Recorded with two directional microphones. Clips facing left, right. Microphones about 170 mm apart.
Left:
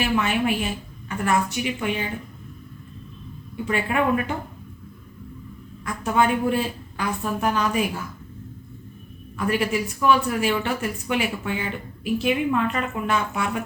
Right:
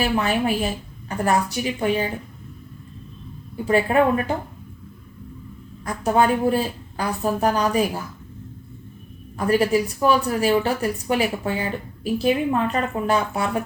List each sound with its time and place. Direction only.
0.0 s speech: 35° right (ahead or behind)
3.7 s speech: 35° right (ahead or behind)
5.8 s speech: 35° right (ahead or behind)
9.5 s speech: 35° right (ahead or behind)